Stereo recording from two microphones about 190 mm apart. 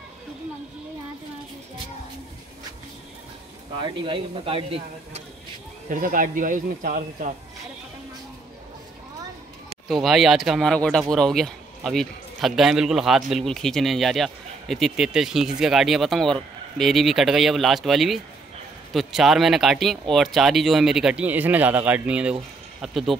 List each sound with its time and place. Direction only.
3.8 s speech: 25° right (ahead or behind)
5.9 s a man's voice: 45° right (ahead or behind)
9.8 s speech: centre (ahead or behind)